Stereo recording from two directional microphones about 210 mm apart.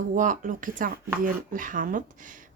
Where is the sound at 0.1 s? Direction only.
40° right (ahead or behind).